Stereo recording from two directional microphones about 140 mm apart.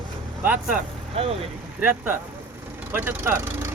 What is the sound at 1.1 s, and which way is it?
Speech, 50° right (ahead or behind).